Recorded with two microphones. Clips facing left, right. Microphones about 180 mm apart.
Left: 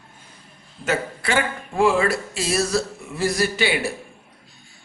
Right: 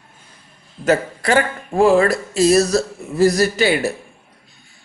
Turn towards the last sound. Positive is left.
turn(degrees=-40)  # may be behind; listen again after turning